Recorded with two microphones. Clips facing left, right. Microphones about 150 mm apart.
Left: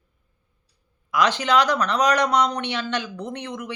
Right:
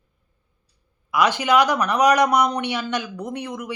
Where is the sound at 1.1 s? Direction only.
10° right (ahead or behind).